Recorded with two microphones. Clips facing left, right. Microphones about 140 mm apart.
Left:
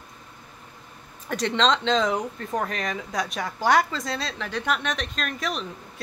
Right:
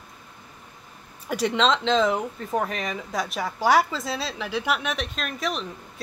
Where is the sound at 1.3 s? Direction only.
10° right (ahead or behind).